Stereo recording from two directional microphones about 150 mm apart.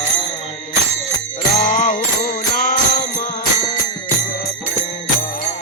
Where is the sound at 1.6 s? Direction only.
60° left (ahead or behind).